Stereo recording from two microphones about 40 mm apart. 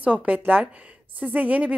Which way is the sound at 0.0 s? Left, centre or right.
Right.